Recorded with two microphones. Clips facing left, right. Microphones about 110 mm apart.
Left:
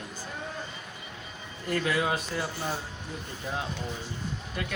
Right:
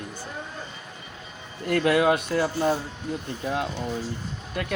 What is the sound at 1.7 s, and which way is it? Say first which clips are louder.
Speech: right 7 dB; 60° right (ahead or behind).